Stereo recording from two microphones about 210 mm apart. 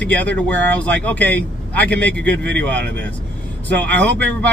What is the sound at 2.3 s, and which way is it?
Speech, 55° right (ahead or behind).